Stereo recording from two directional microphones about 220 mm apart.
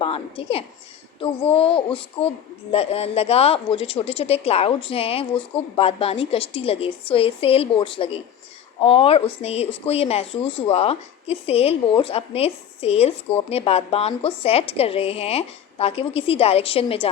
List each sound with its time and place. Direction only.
0.0 s a woman's voice: 25° left (ahead or behind)